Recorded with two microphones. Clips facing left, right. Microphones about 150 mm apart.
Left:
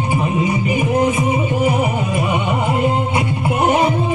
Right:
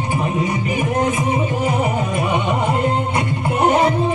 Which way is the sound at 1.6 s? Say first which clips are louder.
Left 2 dB; 10° left (ahead or behind).